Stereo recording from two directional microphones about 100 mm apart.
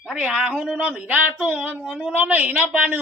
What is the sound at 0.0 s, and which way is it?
Speech, 5° right (ahead or behind).